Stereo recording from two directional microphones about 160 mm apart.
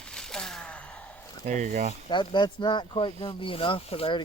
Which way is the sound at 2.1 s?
30° left (ahead or behind).